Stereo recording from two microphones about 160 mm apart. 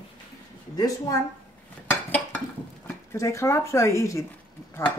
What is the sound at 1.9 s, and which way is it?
Dishes, 10° left (ahead or behind).